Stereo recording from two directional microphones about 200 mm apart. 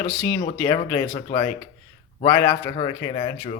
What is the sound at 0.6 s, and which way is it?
Speech, 20° left (ahead or behind).